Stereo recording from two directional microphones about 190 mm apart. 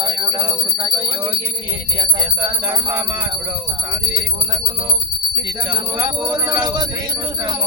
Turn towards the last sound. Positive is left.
turn(degrees=-20)  # may be behind; listen again after turning